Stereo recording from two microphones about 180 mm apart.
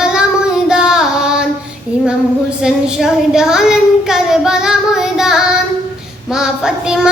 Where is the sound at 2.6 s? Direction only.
5° right (ahead or behind).